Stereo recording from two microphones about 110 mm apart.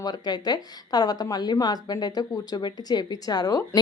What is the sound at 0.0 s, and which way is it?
Speech, 40° left (ahead or behind).